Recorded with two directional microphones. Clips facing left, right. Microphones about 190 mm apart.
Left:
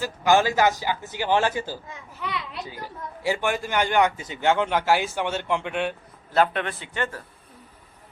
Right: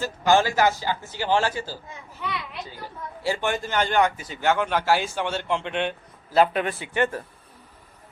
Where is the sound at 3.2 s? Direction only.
15° left (ahead or behind).